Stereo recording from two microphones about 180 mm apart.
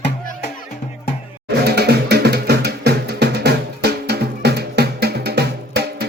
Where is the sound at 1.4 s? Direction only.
65° right (ahead or behind).